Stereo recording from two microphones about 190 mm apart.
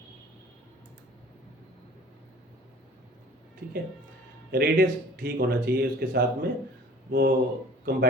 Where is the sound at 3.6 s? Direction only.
55° right (ahead or behind).